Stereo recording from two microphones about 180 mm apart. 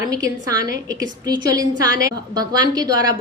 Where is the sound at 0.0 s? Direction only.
20° right (ahead or behind).